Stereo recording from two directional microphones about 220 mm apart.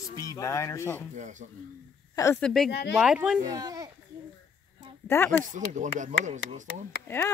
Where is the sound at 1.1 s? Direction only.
35° right (ahead or behind).